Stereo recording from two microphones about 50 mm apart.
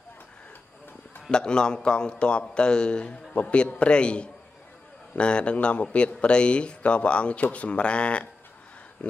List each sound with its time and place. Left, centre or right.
1.3 s a man's voice: centre